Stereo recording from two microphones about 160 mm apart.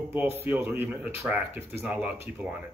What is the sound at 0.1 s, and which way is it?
A man's voice, 10° right (ahead or behind).